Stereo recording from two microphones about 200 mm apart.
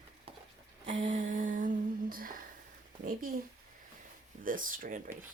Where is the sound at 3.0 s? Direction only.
45° right (ahead or behind).